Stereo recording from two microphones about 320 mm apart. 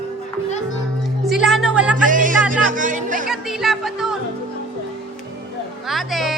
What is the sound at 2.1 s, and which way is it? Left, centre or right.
Music, right.